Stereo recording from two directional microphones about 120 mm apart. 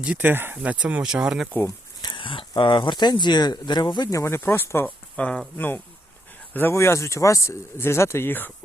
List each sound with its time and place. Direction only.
0.0 s speech: 10° right (ahead or behind)
1.5 s a sound: 25° left (ahead or behind)
2.0 s a sound: 45° left (ahead or behind)
2.6 s speech: 40° left (ahead or behind)
4.2 s speech: 20° left (ahead or behind)
5.2 s speech: 5° left (ahead or behind)